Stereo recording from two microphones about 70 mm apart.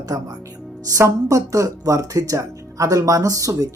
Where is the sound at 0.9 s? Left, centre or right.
Right.